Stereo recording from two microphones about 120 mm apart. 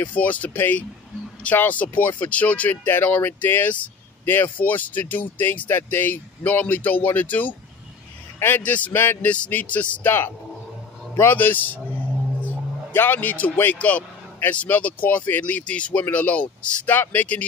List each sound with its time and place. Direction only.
0.0 s speech: 15° left (ahead or behind)
12.9 s speech: 15° left (ahead or behind)